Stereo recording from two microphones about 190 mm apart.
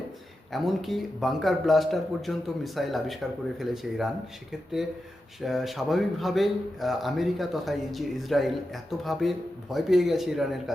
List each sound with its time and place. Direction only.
0.5 s a man's voice: centre (ahead or behind)
5.4 s a man's voice: centre (ahead or behind)